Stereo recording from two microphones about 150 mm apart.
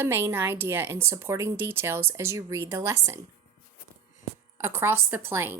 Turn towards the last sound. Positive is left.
turn(degrees=-15)  # may be behind; listen again after turning